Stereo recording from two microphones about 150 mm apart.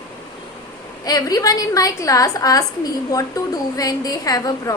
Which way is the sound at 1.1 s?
25° left (ahead or behind).